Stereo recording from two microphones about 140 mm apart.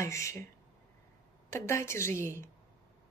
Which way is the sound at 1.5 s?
20° left (ahead or behind).